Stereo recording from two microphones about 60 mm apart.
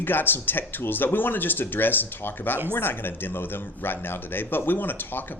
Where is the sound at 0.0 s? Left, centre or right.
Left.